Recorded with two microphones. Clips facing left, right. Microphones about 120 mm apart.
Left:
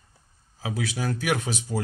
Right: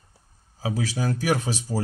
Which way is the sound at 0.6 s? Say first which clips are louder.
Right 2 dB; 30° right (ahead or behind).